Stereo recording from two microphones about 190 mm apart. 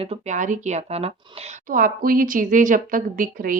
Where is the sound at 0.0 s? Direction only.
35° right (ahead or behind).